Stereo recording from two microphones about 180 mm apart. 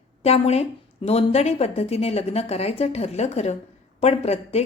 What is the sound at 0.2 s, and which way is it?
A woman's voice, 35° left (ahead or behind).